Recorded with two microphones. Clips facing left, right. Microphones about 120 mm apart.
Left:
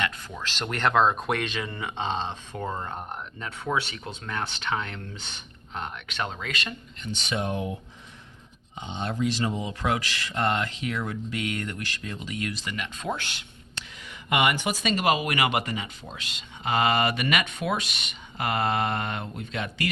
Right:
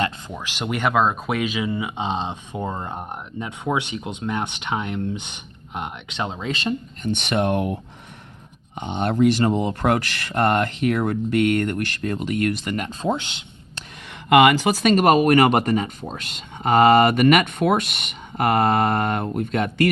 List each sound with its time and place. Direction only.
0.3 s speech: 15° right (ahead or behind)
7.0 s speech: 60° right (ahead or behind)
13.0 s speech: 25° right (ahead or behind)
14.3 s speech: 90° right; by 19.9 s 50° right (ahead or behind)